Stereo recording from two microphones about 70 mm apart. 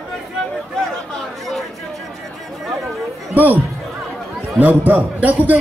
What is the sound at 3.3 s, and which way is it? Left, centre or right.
Speech, right.